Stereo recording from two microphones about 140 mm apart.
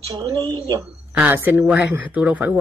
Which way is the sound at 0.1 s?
25° right (ahead or behind).